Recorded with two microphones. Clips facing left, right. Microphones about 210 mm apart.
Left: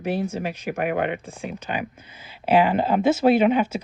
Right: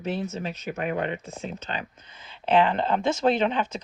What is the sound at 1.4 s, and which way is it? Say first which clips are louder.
Speech: left 4 dB; 10° left (ahead or behind).